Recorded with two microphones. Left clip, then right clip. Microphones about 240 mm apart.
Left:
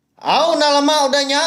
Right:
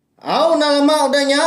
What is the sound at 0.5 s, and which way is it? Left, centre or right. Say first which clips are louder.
Speech: even; centre.